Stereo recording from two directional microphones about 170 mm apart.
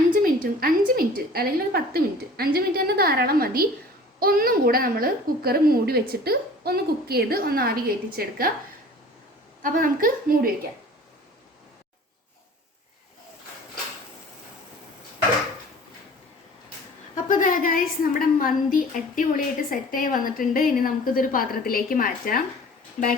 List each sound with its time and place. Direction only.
0.1 s a woman's voice: 55° right (ahead or behind)
9.6 s a woman's voice: 55° right (ahead or behind)
17.2 s a woman's voice: 50° left (ahead or behind)